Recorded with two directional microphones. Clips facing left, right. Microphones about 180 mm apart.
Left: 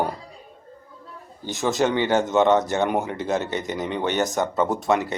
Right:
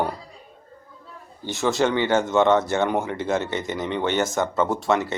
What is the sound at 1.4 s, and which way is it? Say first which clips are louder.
Speech: even; 15° left (ahead or behind).